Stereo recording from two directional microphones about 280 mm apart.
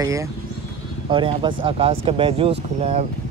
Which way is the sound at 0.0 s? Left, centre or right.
Centre.